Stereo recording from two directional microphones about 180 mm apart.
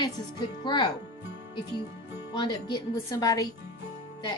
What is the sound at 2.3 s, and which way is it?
A woman's voice, 25° left (ahead or behind).